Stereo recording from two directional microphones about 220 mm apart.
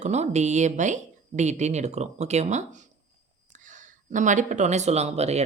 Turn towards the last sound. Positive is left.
turn(degrees=-30)  # may be behind; listen again after turning